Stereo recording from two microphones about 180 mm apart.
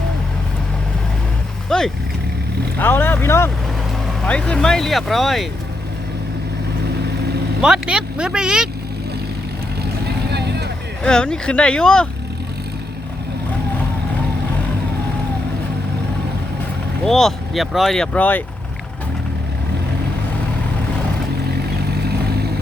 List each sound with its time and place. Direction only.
1.7 s vehicle: 5° left (ahead or behind)
2.7 s speech: 10° left (ahead or behind)
7.6 s speech: 5° right (ahead or behind)
10.3 s vehicle: 65° right (ahead or behind)
11.0 s speech: 5° left (ahead or behind)
17.1 s speech: centre (ahead or behind)